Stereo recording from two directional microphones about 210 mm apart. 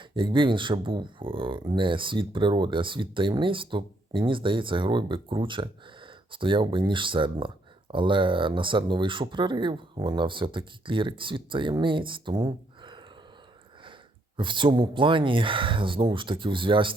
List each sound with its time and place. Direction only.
0.0 s speech: 25° right (ahead or behind)
14.3 s speech: 25° right (ahead or behind)